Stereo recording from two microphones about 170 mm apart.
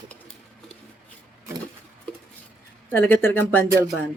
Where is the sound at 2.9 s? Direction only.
10° left (ahead or behind).